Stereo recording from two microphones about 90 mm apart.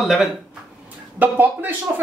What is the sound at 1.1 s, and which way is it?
Speech, 20° right (ahead or behind).